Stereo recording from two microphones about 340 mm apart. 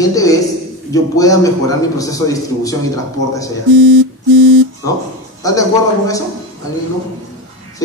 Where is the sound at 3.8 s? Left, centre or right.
Right.